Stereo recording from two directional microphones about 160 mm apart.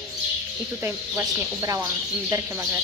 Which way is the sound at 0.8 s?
20° right (ahead or behind).